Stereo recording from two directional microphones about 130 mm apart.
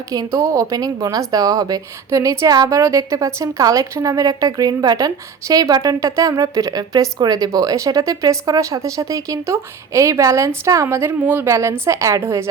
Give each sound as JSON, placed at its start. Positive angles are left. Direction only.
{"t": 0.1, "sound": "a woman's voice", "side_deg": -25}